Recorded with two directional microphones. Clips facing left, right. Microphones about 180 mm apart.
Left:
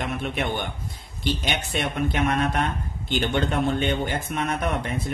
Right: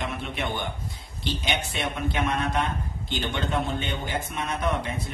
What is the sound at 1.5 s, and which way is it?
A man's voice, 55° left (ahead or behind).